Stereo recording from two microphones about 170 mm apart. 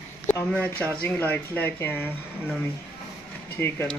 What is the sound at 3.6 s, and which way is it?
Speech, 10° left (ahead or behind).